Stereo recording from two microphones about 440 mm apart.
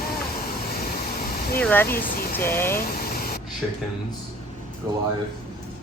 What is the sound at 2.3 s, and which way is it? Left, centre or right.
Speech, centre.